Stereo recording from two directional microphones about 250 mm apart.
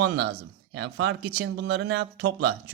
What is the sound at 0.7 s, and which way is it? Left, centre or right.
Speech, right.